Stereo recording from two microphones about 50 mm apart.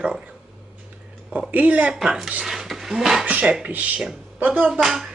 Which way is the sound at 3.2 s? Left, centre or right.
Right.